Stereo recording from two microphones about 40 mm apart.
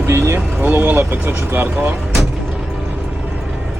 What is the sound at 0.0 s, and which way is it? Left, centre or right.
Vehicle, right.